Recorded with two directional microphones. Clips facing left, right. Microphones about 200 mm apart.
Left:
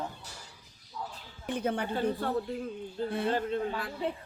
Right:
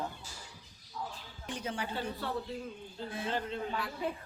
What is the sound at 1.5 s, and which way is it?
Speech, 55° left (ahead or behind).